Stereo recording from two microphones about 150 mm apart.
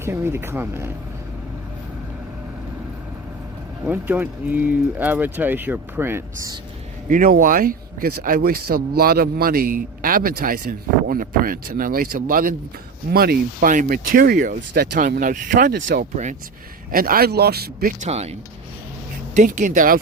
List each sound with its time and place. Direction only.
0.0 s speech: 15° right (ahead or behind)
3.8 s speech: 10° right (ahead or behind)
7.1 s speech: 65° right (ahead or behind)
13.1 s speech: 90° right
18.0 s speech: 45° right (ahead or behind); by 20.0 s 60° right (ahead or behind)